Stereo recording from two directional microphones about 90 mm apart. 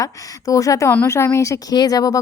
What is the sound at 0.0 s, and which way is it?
A woman's voice, 40° left (ahead or behind).